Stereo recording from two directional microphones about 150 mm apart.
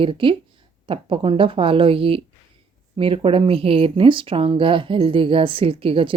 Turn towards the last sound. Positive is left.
turn(degrees=-35)  # may be behind; listen again after turning